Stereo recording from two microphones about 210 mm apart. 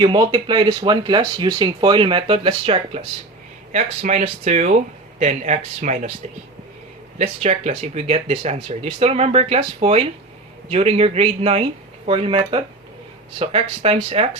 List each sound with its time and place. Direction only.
0.0 s speech: 20° right (ahead or behind)
7.2 s speech: 30° right (ahead or behind)